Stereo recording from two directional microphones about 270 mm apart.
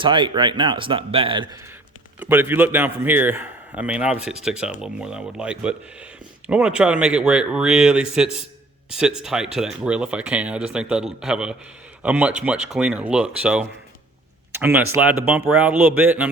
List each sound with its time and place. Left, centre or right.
0.0 s speech: centre
2.1 s a man's voice: centre